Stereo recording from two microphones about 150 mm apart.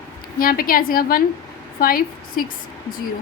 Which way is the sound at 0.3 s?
75° left (ahead or behind).